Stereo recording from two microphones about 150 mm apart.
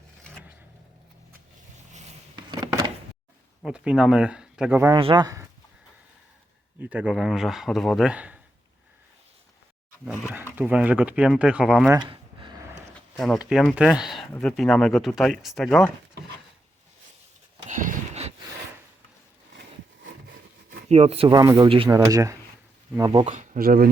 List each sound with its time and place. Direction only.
1.9 s a sound: 50° right (ahead or behind)
2.3 s a sound: 30° right (ahead or behind)
3.6 s speech: 5° right (ahead or behind)
4.9 s speech: 35° right (ahead or behind)
5.2 s speech: 20° right (ahead or behind)
6.8 s a man's voice: 10° right (ahead or behind)
10.1 s speech: 15° right (ahead or behind)
11.9 s a sound: 30° right (ahead or behind)
12.9 s a man's voice: centre (ahead or behind)
17.7 s a sound: 55° right (ahead or behind)
20.9 s speech: 45° right (ahead or behind)
21.8 s speech: 20° right (ahead or behind)
23.2 s speech: 55° right (ahead or behind)
23.6 s speech: 80° right